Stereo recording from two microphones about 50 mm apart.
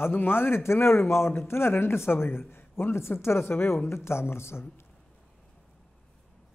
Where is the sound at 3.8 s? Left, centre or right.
Left.